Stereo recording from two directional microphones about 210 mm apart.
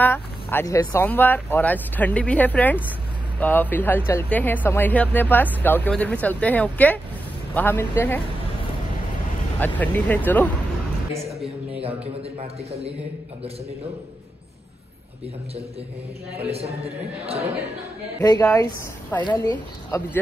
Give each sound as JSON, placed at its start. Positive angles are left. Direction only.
{"t": 0.0, "sound": "speech", "side_deg": 10}
{"t": 9.6, "sound": "speech", "side_deg": 5}
{"t": 11.4, "sound": "a man's voice", "side_deg": -30}
{"t": 16.4, "sound": "a man's voice", "side_deg": -30}
{"t": 18.2, "sound": "speech", "side_deg": 15}